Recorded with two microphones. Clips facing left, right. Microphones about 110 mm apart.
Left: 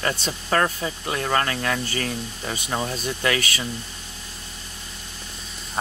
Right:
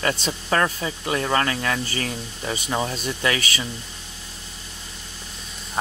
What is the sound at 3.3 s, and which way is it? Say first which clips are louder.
Speech: left 1 dB; 45° left (ahead or behind).